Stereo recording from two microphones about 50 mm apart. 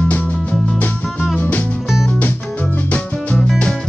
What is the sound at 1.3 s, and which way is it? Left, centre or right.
Music, left.